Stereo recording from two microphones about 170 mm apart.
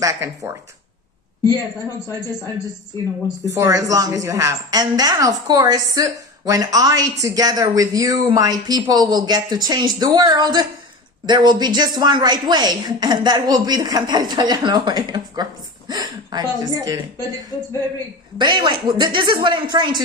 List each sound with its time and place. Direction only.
0.0 s speech: 15° right (ahead or behind)
3.5 s a woman's voice: 20° right (ahead or behind)
17.5 s speech: 15° left (ahead or behind)
18.3 s a woman's voice: 25° right (ahead or behind)